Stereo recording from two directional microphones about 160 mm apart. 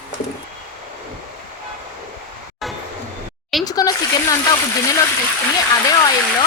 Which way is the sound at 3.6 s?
25° left (ahead or behind).